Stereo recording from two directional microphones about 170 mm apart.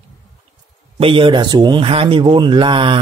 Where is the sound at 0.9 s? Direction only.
30° right (ahead or behind).